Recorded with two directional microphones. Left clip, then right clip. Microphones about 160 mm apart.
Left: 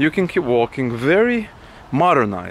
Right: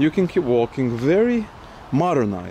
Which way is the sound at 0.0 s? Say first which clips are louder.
Left 1 dB; 15° left (ahead or behind).